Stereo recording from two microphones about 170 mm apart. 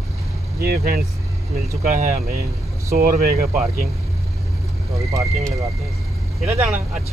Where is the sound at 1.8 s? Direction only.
60° right (ahead or behind).